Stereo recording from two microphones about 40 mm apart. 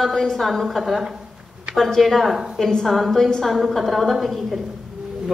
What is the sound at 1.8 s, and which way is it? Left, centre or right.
A woman's voice, centre.